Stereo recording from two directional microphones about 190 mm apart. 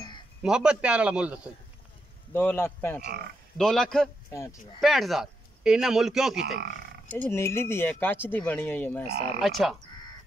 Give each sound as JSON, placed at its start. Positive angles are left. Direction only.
{"t": 0.4, "sound": "a man's voice", "side_deg": -5}
{"t": 2.3, "sound": "a man's voice", "side_deg": 10}
{"t": 4.3, "sound": "speech", "side_deg": 15}
{"t": 4.7, "sound": "speech", "side_deg": 0}
{"t": 6.3, "sound": "speech", "side_deg": -55}
{"t": 7.1, "sound": "speech", "side_deg": 10}
{"t": 9.4, "sound": "a man's voice", "side_deg": 0}